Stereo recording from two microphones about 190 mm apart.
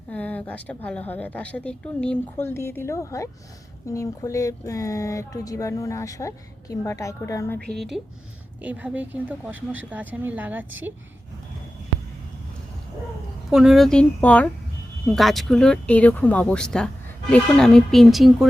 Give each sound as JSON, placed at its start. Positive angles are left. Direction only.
{"t": 0.1, "sound": "speech", "side_deg": 10}
{"t": 7.8, "sound": "speech", "side_deg": 0}
{"t": 13.5, "sound": "speech", "side_deg": 0}